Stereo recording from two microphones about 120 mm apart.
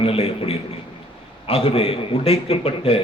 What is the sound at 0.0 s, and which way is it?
A man's voice, 55° left (ahead or behind).